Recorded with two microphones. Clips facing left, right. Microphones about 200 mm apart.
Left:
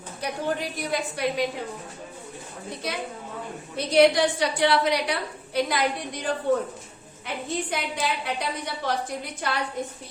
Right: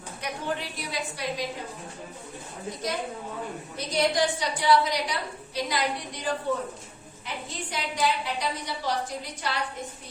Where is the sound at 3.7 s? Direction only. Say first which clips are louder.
Left 7 dB; 65° left (ahead or behind).